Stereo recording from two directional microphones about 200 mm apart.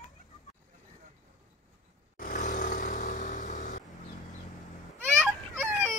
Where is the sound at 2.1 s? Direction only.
40° left (ahead or behind).